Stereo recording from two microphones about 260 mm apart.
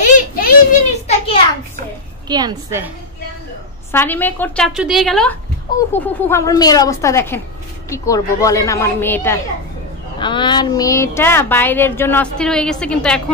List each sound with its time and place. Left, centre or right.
0.0 s a sound: left
2.2 s a woman's voice: centre
3.9 s a woman's voice: centre